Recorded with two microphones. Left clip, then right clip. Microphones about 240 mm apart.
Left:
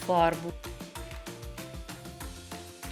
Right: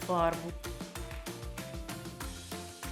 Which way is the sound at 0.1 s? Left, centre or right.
Left.